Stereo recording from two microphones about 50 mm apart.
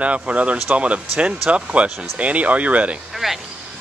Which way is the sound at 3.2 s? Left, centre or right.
Centre.